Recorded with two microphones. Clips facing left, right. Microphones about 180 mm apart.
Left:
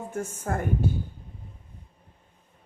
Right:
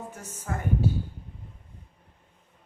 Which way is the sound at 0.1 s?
50° left (ahead or behind).